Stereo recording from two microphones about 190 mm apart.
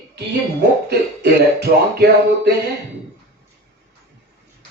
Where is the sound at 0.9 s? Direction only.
60° right (ahead or behind).